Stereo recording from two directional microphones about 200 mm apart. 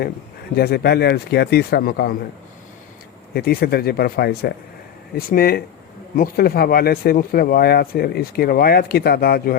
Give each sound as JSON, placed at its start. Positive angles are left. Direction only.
{"t": 0.5, "sound": "speech", "side_deg": 50}
{"t": 3.3, "sound": "speech", "side_deg": 50}